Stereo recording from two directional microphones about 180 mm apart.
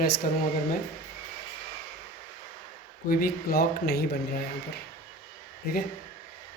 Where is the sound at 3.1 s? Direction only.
55° left (ahead or behind).